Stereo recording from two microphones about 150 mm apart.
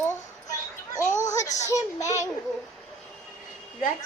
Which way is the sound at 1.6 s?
20° left (ahead or behind).